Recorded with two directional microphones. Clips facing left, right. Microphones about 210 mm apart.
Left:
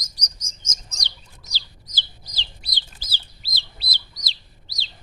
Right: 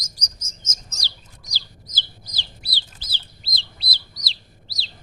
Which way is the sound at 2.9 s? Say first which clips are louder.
Even; 10° left (ahead or behind).